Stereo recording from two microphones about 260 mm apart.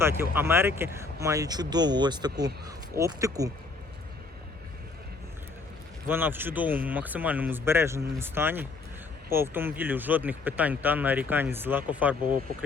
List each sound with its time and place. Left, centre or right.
0.0 s speech: centre
6.1 s speech: centre